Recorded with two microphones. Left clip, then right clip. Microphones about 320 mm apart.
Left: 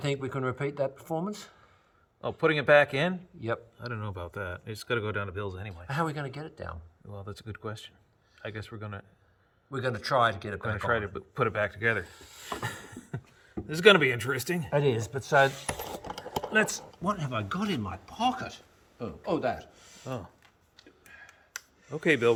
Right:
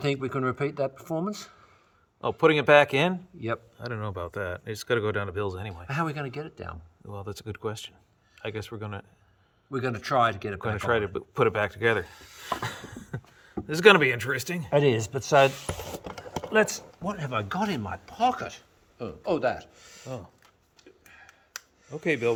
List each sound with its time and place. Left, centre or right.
0.0 s speech: centre
10.7 s speech: right
12.6 s speech: centre
14.7 s speech: right
16.5 s speech: centre
21.1 s a sound: centre